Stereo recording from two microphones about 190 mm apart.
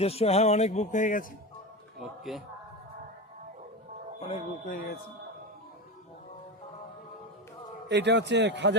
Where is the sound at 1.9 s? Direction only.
Centre (ahead or behind).